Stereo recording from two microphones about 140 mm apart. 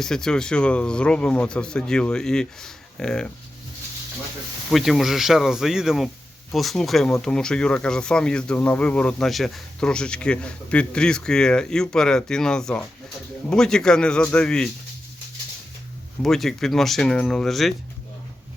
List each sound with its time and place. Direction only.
0.0 s speech: 5° left (ahead or behind)
4.7 s speech: centre (ahead or behind)
16.2 s speech: centre (ahead or behind)